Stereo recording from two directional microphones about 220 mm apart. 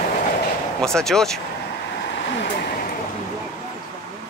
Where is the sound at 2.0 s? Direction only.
50° left (ahead or behind).